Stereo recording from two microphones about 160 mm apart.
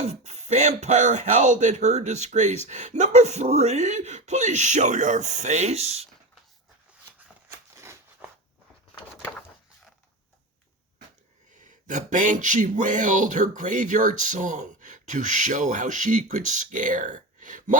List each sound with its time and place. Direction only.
0.1 s speech: 45° right (ahead or behind)
7.8 s a sound: 15° right (ahead or behind)
11.9 s speech: 50° right (ahead or behind)